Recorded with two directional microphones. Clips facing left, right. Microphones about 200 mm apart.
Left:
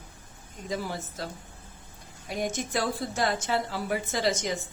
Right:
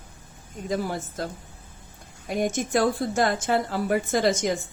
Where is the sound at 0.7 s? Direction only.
50° right (ahead or behind).